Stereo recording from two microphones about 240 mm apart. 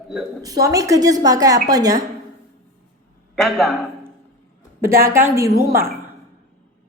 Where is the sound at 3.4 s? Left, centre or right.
Centre.